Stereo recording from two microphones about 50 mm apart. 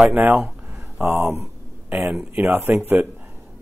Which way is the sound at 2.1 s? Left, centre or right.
Right.